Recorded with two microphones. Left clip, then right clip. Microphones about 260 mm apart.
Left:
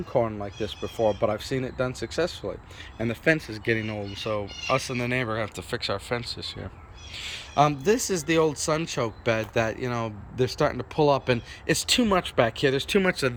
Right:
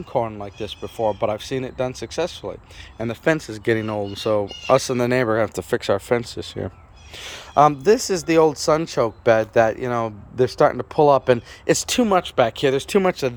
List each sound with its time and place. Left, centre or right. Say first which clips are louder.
0.1 s speech: right 2 dB; centre; by 6.2 s right
6.3 s speech: right 3 dB; right
7.2 s speech: right 7 dB; centre